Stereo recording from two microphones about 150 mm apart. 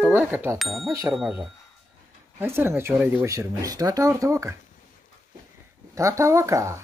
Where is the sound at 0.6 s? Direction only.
Centre (ahead or behind).